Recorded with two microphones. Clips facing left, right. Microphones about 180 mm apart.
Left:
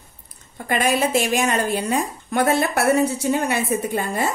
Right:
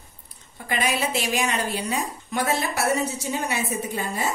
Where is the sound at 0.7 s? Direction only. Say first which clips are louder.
Left 6 dB; 50° left (ahead or behind).